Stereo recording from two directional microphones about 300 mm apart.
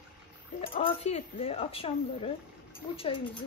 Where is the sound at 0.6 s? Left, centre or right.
Centre.